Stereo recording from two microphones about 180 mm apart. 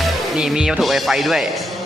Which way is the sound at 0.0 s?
5° right (ahead or behind).